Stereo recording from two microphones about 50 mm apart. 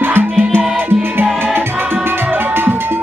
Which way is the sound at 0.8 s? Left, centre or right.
Right.